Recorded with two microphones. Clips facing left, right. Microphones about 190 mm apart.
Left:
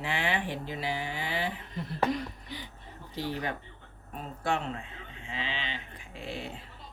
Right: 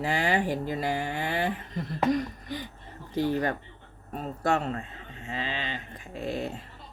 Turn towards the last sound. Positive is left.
turn(degrees=-40)  # may be behind; listen again after turning